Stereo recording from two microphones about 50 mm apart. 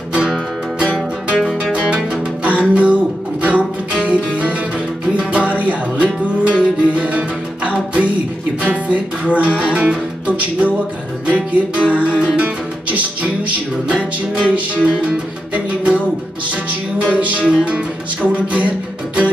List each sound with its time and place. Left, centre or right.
1.3 s music: centre
1.7 s music: right
17.0 s music: right